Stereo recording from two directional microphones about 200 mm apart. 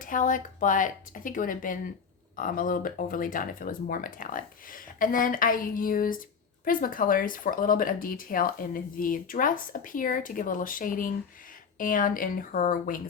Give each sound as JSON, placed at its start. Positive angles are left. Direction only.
{"t": 0.0, "sound": "speech", "side_deg": 40}